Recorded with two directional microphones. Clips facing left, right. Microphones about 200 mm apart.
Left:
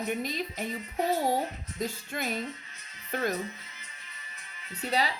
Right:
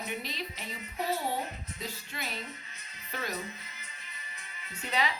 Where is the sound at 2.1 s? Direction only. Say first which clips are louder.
Left 7 dB; 50° left (ahead or behind).